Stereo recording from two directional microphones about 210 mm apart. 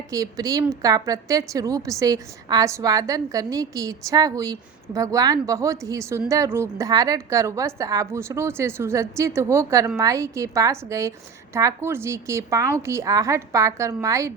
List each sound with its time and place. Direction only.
0.1 s a woman's voice: 15° right (ahead or behind)